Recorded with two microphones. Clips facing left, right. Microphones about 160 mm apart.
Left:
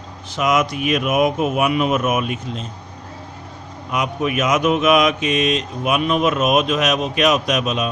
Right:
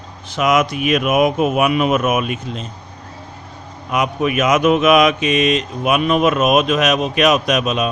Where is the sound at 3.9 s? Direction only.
65° right (ahead or behind).